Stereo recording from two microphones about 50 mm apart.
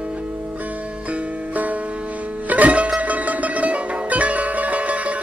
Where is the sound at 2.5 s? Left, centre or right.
Right.